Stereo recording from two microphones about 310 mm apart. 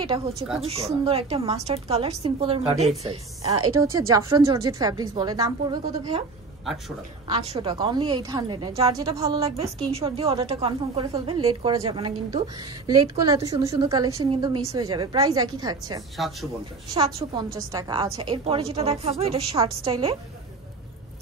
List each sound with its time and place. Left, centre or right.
0.0 s a woman's voice: centre
0.3 s speech: centre
0.7 s a woman's voice: centre
4.1 s a woman's voice: centre
7.2 s a woman's voice: centre
16.2 s speech: centre
16.9 s a woman's voice: centre